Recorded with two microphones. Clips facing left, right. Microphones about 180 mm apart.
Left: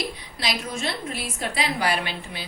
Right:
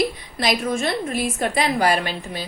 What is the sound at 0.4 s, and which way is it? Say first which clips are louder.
Speech: right 7 dB; 50° right (ahead or behind).